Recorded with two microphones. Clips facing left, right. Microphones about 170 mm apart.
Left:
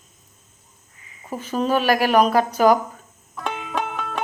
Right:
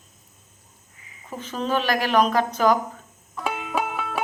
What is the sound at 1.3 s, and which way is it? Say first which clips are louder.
Speech: left 4 dB; 10° left (ahead or behind).